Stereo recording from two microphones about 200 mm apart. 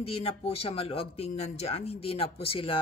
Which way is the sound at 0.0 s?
30° left (ahead or behind).